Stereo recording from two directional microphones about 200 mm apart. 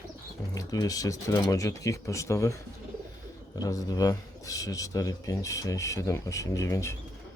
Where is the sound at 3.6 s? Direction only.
20° left (ahead or behind).